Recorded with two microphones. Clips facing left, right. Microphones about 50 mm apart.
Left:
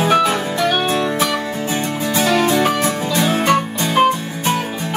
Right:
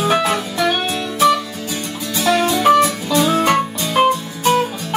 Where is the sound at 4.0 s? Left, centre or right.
Centre.